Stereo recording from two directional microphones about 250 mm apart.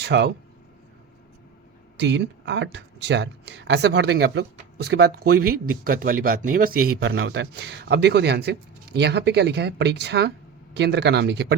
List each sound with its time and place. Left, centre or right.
0.0 s speech: right
2.0 s speech: right